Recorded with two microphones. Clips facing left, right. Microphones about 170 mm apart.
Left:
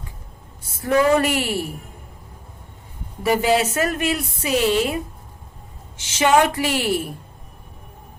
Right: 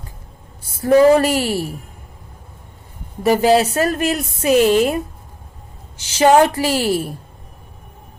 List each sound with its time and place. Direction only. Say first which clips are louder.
0.8 s speech: right 6 dB; 35° right (ahead or behind)
3.2 s speech: right 5 dB; 40° right (ahead or behind)
6.0 s speech: right 5 dB; 35° right (ahead or behind)